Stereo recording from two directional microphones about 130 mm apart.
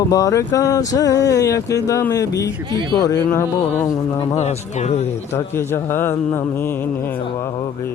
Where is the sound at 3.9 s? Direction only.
25° left (ahead or behind).